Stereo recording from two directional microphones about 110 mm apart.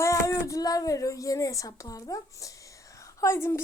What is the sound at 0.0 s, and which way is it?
Speech, 30° left (ahead or behind).